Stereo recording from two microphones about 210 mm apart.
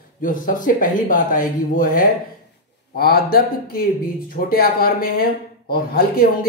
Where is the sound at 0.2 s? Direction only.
40° left (ahead or behind).